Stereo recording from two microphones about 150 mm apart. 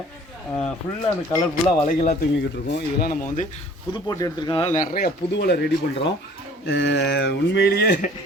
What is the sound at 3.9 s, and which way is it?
Speech, 25° left (ahead or behind).